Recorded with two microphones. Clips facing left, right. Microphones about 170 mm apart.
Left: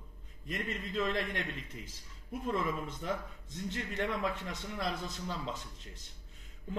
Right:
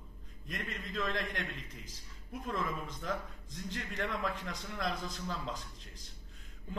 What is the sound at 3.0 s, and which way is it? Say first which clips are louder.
Speech: even; 25° left (ahead or behind).